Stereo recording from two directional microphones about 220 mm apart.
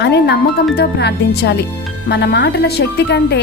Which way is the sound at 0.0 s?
50° left (ahead or behind).